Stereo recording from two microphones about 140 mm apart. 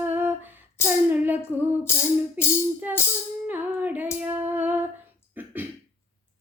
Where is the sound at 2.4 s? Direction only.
10° right (ahead or behind).